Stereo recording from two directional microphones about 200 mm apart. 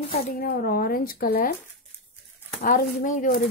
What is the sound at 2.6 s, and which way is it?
Speech, 40° left (ahead or behind).